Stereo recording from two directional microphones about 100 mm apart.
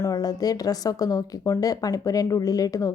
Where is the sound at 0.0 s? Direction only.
40° left (ahead or behind).